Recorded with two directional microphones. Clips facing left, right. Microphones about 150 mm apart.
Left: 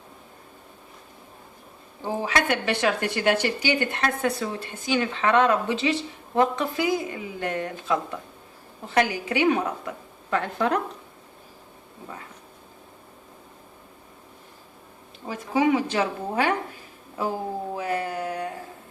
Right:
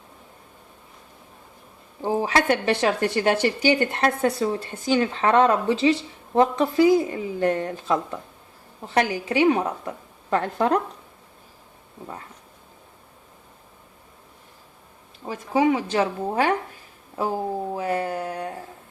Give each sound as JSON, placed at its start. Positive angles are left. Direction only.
{"t": 2.0, "sound": "speech", "side_deg": -35}
{"t": 9.0, "sound": "speech", "side_deg": -35}
{"t": 15.3, "sound": "speech", "side_deg": -30}
{"t": 17.7, "sound": "a sound", "side_deg": -35}